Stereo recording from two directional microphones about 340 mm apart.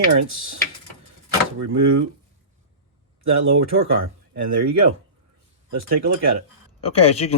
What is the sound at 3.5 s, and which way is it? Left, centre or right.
Speech, right.